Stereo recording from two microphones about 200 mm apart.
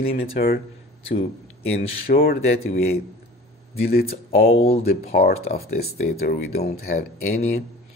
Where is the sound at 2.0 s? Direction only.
50° left (ahead or behind).